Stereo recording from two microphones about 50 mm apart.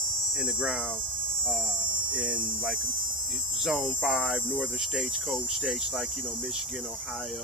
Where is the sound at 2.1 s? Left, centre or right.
Right.